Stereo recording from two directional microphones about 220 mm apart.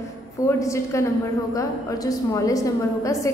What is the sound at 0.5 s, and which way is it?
A woman's voice, 15° left (ahead or behind).